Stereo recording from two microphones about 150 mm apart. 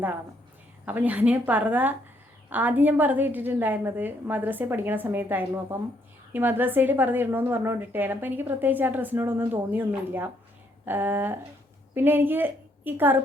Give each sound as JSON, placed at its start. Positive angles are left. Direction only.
{"t": 0.9, "sound": "a woman's voice", "side_deg": -10}